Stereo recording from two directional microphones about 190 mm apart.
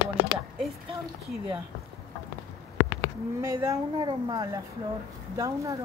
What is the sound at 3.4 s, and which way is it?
A woman's voice, 15° right (ahead or behind).